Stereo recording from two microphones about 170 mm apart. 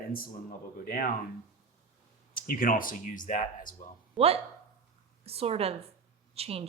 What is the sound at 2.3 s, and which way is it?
Speech, 55° left (ahead or behind).